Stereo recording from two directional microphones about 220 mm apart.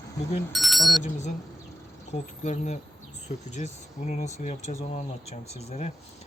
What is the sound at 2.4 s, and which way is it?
Speech, 30° left (ahead or behind).